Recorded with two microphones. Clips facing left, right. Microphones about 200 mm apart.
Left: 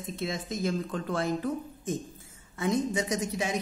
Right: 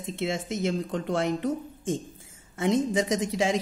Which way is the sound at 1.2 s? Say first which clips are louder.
Right 1 dB; 80° right.